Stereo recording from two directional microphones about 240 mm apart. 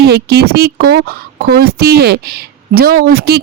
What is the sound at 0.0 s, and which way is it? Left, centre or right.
A woman's voice, right.